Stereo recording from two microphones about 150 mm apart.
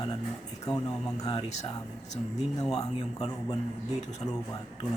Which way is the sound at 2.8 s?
25° left (ahead or behind).